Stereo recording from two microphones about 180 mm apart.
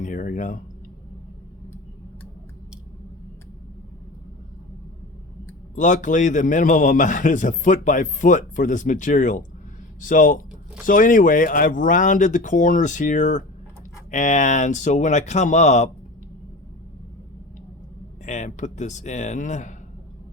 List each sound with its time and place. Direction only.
0.0 s a sound: 45° left (ahead or behind)
5.7 s a man's voice: 45° left (ahead or behind)
18.3 s speech: 40° left (ahead or behind)